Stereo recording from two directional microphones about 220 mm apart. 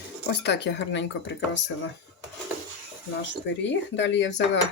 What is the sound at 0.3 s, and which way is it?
Speech, 50° left (ahead or behind).